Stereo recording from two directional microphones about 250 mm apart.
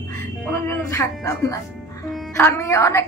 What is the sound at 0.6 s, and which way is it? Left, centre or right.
A woman's voice, centre.